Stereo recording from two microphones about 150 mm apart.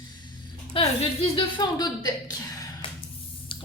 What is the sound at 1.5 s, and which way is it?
A woman's voice, 30° left (ahead or behind).